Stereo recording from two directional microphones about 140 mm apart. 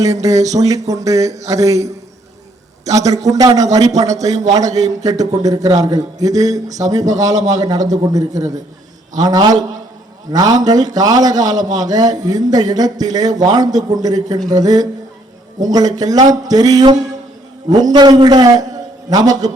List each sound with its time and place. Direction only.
0.0 s a man's voice: 25° right (ahead or behind)